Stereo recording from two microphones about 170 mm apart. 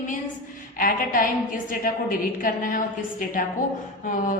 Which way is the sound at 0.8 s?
55° left (ahead or behind).